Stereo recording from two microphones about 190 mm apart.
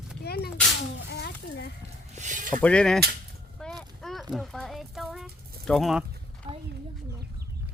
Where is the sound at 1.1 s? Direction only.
60° left (ahead or behind).